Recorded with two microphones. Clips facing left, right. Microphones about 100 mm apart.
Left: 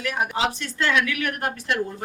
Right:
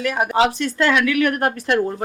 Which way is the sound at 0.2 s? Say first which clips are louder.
Right 7 dB; 85° right.